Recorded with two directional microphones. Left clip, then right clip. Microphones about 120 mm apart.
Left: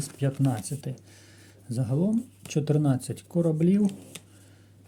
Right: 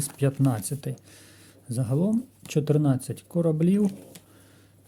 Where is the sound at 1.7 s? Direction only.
25° right (ahead or behind).